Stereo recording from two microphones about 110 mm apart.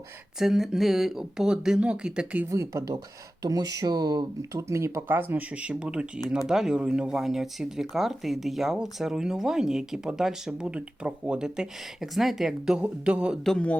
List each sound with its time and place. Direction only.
0.3 s speech: 5° right (ahead or behind)
2.5 s speech: 30° right (ahead or behind)
4.7 s speech: 25° right (ahead or behind); by 13.4 s 10° right (ahead or behind)
13.4 s a man's voice: 10° left (ahead or behind)